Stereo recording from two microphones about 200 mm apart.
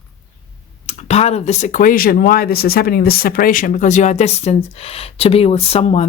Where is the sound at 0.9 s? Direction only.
30° left (ahead or behind).